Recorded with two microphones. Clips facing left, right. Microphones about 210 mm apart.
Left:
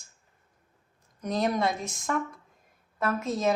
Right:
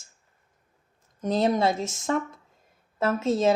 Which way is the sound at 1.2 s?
25° right (ahead or behind).